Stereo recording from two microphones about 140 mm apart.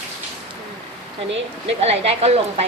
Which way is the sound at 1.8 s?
50° right (ahead or behind).